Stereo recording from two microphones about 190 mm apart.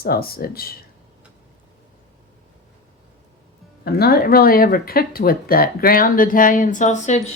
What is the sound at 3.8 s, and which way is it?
Speech, 55° left (ahead or behind).